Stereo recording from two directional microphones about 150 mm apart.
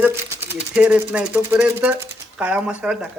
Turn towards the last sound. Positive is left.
turn(degrees=-5)  # may be behind; listen again after turning